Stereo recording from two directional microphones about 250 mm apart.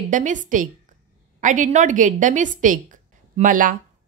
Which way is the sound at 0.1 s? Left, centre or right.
Right.